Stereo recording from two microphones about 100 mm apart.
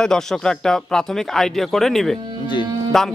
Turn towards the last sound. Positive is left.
turn(degrees=5)  # may be behind; listen again after turning